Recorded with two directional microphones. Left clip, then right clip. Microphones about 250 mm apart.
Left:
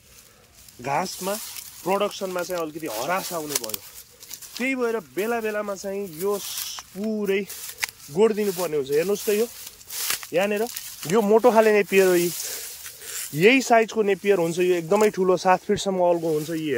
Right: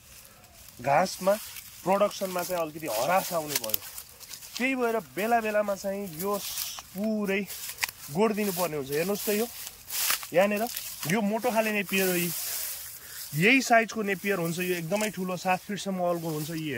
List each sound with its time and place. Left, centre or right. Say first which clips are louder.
0.8 s speech: right 2 dB; centre
4.6 s speech: left 2 dB; centre
10.0 s a sound: left 1 dB; centre
11.3 s speech: left 12 dB; centre
13.4 s speech: left 5 dB; centre